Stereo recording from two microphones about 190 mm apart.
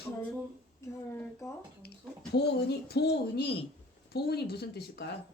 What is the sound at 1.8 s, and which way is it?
A woman's voice, 55° left (ahead or behind).